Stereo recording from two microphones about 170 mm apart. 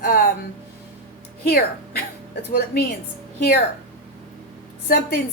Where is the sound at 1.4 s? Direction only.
65° left (ahead or behind).